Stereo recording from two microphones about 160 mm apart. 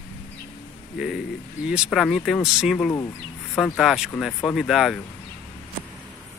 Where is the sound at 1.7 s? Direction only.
Centre (ahead or behind).